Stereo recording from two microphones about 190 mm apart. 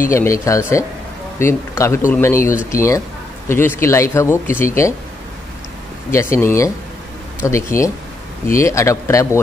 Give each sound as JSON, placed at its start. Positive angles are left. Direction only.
{"t": 0.1, "sound": "speech", "side_deg": 15}
{"t": 6.1, "sound": "speech", "side_deg": 15}